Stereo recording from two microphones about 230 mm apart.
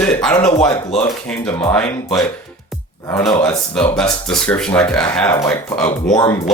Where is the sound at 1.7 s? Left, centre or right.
Centre.